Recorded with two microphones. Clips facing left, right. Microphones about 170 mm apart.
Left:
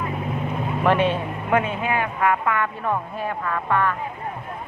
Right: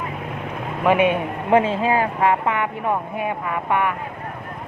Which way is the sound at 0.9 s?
10° right (ahead or behind).